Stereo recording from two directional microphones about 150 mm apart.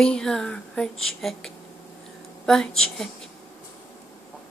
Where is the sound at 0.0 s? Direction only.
5° left (ahead or behind).